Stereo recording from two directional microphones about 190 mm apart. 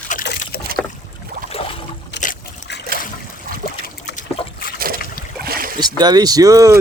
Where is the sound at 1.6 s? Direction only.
30° left (ahead or behind).